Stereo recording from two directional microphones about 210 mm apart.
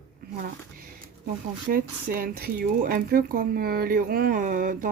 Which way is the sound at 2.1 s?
45° right (ahead or behind).